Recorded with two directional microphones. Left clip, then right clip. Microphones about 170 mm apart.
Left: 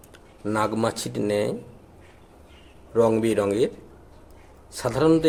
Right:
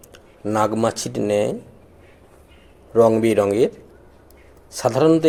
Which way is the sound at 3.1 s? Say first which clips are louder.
Right 5 dB; 15° right (ahead or behind).